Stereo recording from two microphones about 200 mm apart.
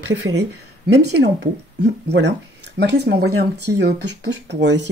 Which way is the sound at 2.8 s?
55° right (ahead or behind).